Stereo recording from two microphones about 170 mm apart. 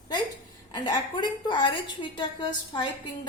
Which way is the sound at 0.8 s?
25° left (ahead or behind).